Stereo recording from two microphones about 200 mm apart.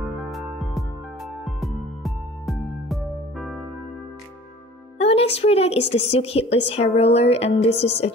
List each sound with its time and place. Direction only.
0.0 s music: centre (ahead or behind)
4.9 s a woman's voice: 30° left (ahead or behind)